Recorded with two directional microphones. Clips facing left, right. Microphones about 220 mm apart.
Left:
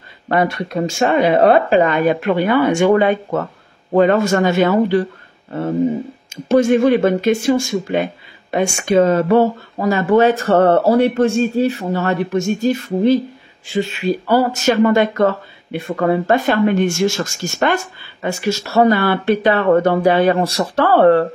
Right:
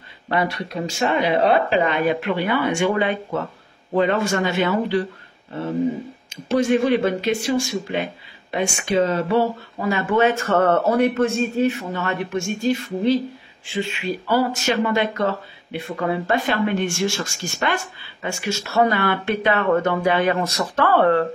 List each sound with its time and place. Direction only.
0.3 s a man's voice: 45° left (ahead or behind)
6.3 s speech: 45° left (ahead or behind)